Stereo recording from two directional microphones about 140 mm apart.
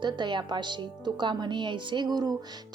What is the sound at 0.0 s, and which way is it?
A woman's voice, 35° right (ahead or behind).